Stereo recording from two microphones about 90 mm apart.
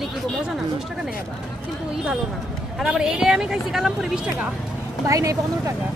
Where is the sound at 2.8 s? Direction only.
10° right (ahead or behind).